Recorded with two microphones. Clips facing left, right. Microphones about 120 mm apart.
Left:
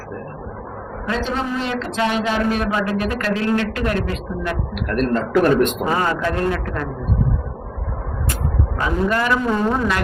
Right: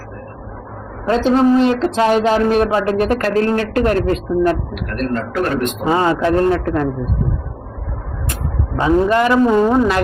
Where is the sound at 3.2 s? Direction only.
40° right (ahead or behind).